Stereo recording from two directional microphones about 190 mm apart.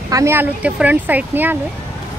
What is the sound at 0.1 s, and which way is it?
Speech, 15° right (ahead or behind).